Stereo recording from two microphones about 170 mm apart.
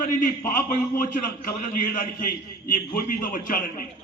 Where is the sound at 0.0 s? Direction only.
50° left (ahead or behind).